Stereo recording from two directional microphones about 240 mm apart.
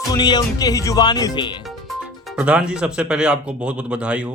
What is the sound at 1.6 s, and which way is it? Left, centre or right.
Speech, centre.